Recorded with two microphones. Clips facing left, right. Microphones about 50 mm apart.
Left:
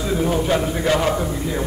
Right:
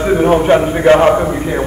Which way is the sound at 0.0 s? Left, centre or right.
Right.